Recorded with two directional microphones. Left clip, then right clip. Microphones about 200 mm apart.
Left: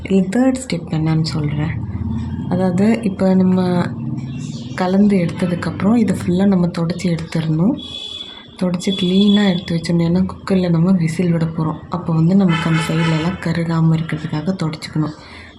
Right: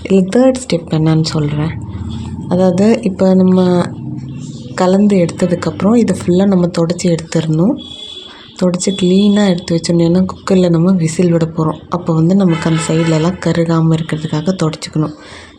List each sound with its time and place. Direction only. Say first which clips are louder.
0.1 s speech: right 6 dB; 25° right (ahead or behind)